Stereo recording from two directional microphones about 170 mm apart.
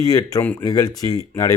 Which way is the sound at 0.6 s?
20° left (ahead or behind).